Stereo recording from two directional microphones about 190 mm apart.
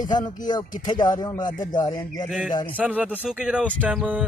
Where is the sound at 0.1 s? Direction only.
20° left (ahead or behind).